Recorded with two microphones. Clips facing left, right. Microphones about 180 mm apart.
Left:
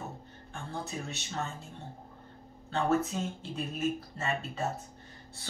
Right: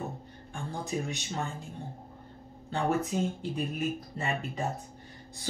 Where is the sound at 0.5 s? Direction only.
15° right (ahead or behind).